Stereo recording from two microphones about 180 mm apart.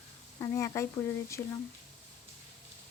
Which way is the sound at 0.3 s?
20° left (ahead or behind).